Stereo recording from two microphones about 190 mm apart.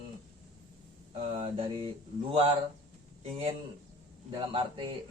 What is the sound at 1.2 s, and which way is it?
Speech, 30° right (ahead or behind).